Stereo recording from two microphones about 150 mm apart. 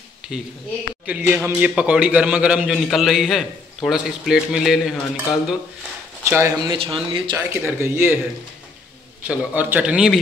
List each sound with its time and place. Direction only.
0.2 s a sound: 5° right (ahead or behind)
1.0 s a man's voice: 10° right (ahead or behind)
6.2 s speech: 15° right (ahead or behind)
6.7 s speech: 35° right (ahead or behind)
7.3 s speech: 15° right (ahead or behind)
9.3 s speech: 10° right (ahead or behind)